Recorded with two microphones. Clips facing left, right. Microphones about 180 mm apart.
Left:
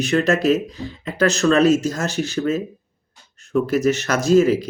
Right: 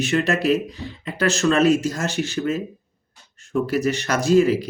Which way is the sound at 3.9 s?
40° left (ahead or behind).